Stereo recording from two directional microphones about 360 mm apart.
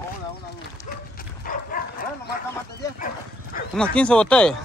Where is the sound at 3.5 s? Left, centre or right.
Left.